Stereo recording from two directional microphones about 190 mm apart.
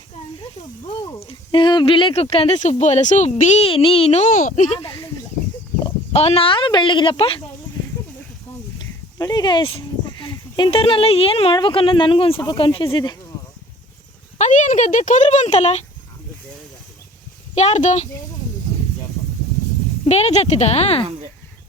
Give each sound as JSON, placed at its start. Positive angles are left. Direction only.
{"t": 0.9, "sound": "speech", "side_deg": 25}
{"t": 8.8, "sound": "speech", "side_deg": 20}
{"t": 14.3, "sound": "speech", "side_deg": 40}
{"t": 17.5, "sound": "speech", "side_deg": 35}
{"t": 20.1, "sound": "speech", "side_deg": 35}